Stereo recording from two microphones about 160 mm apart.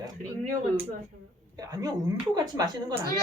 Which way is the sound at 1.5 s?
25° right (ahead or behind).